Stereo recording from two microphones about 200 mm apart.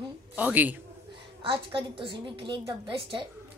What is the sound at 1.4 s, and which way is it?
A child's voice, 25° right (ahead or behind).